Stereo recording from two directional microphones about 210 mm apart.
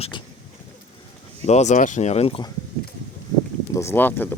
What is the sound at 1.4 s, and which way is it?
Speech, 30° left (ahead or behind).